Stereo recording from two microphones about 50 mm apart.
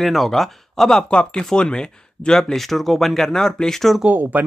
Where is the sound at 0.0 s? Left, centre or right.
Centre.